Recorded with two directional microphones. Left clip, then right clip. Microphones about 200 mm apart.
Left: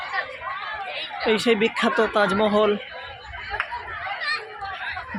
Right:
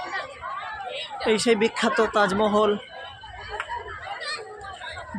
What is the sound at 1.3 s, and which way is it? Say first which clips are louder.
Speech: left 1 dB; 15° left (ahead or behind).